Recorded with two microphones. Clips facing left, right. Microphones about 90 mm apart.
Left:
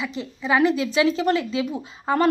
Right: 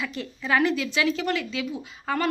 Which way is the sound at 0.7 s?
30° left (ahead or behind).